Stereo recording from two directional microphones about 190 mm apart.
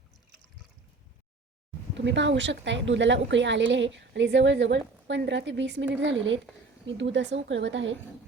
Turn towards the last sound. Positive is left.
turn(degrees=-70)  # may be behind; listen again after turning